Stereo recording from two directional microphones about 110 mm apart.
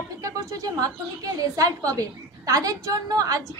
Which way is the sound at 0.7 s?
30° right (ahead or behind).